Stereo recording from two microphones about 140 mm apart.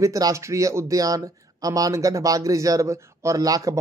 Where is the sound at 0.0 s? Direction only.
25° right (ahead or behind).